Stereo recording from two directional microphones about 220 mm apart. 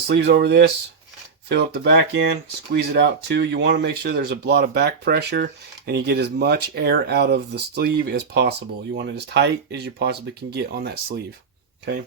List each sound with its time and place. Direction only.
0.1 s speech: 50° right (ahead or behind)